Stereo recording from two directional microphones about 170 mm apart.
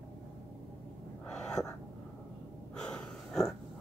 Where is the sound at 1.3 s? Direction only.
5° left (ahead or behind).